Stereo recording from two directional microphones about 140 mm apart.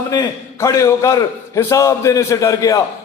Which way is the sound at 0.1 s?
25° left (ahead or behind).